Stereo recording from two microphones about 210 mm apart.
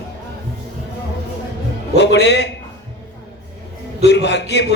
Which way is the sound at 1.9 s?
55° left (ahead or behind).